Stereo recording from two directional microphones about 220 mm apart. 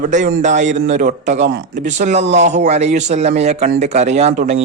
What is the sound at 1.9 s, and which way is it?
A man's voice, 35° right (ahead or behind).